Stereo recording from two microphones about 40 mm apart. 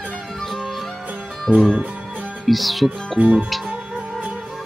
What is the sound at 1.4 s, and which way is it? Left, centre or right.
Speech, centre.